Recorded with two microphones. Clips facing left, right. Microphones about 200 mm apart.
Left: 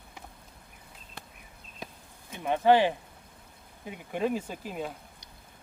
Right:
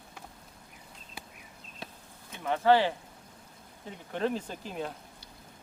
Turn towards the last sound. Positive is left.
turn(degrees=5)  # may be behind; listen again after turning